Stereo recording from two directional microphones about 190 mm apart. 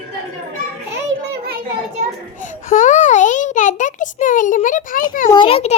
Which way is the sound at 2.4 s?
45° left (ahead or behind).